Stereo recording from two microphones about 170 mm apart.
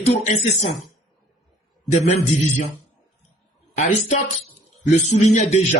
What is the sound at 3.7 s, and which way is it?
A man's voice, 40° left (ahead or behind).